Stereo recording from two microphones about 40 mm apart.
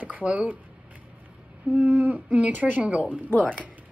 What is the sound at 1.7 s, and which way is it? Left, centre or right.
Speech, right.